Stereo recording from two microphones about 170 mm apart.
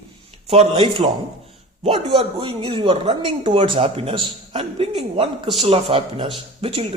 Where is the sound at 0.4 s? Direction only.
35° right (ahead or behind).